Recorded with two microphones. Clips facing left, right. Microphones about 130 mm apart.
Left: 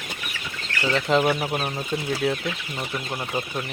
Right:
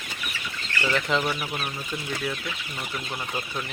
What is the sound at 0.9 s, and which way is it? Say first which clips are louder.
Speech: left 7 dB; 35° left (ahead or behind).